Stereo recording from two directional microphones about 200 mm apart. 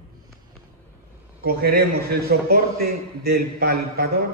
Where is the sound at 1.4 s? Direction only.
50° right (ahead or behind).